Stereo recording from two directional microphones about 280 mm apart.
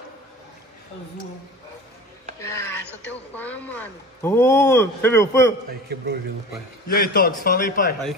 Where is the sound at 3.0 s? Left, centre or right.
Centre.